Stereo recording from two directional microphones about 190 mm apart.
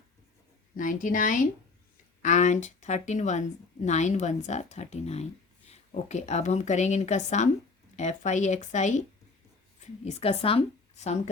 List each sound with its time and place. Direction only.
0.8 s a woman's voice: 45° left (ahead or behind)